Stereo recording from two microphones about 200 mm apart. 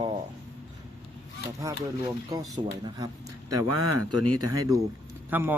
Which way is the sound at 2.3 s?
20° right (ahead or behind).